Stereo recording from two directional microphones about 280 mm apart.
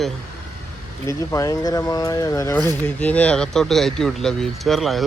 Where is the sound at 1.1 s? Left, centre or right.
Centre.